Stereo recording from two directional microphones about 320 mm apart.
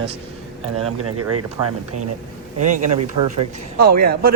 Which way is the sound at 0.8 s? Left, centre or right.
Right.